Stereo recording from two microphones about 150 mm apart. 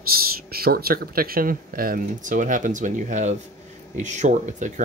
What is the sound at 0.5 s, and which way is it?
Speech, 90° right.